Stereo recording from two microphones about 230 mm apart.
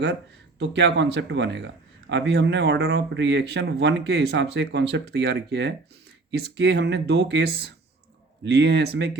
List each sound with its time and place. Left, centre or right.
0.6 s a man's voice: right